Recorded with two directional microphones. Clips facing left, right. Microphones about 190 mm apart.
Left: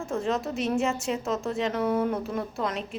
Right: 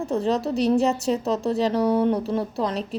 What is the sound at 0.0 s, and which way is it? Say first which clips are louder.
A woman's voice: right 5 dB; 35° right (ahead or behind).